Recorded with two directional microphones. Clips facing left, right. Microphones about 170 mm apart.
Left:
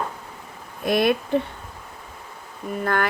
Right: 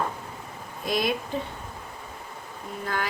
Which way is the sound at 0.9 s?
60° left (ahead or behind).